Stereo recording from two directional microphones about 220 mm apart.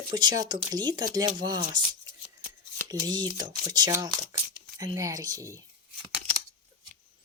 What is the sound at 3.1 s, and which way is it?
Speech, 20° right (ahead or behind).